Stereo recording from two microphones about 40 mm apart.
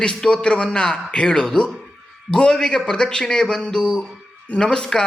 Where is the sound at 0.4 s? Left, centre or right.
Left.